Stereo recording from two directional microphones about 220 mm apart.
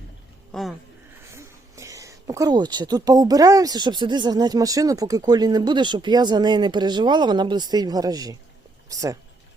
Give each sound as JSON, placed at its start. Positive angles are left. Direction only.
{"t": 0.5, "sound": "speech", "side_deg": 0}
{"t": 1.3, "sound": "speech", "side_deg": -15}